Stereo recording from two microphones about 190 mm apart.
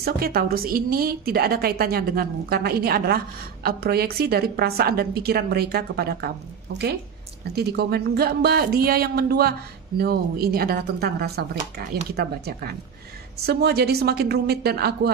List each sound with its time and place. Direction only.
0.0 s a woman's voice: 50° right (ahead or behind)
7.5 s speech: 60° right (ahead or behind)